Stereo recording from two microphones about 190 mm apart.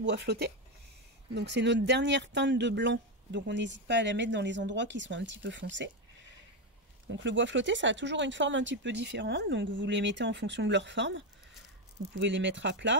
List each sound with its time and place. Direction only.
0.0 s speech: 60° right (ahead or behind)
7.1 s speech: 75° right (ahead or behind)